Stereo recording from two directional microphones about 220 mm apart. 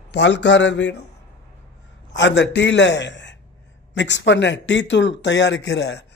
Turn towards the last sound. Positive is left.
turn(degrees=50)  # may be behind; listen again after turning